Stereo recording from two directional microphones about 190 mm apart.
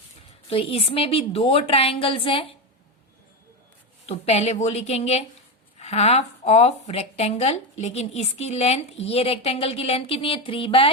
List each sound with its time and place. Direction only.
0.5 s a woman's voice: 30° left (ahead or behind)
4.0 s speech: 30° left (ahead or behind)